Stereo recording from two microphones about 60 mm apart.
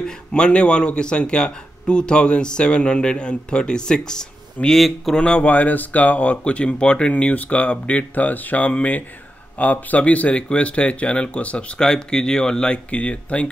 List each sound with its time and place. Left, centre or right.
0.0 s speech: centre
5.1 s speech: centre